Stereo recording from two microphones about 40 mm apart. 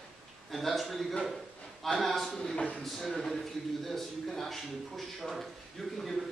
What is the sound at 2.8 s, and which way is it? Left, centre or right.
Speech, centre.